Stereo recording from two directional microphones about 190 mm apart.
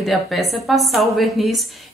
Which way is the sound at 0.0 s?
Centre (ahead or behind).